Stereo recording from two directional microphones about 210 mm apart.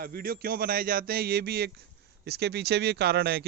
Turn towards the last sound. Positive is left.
turn(degrees=-50)  # may be behind; listen again after turning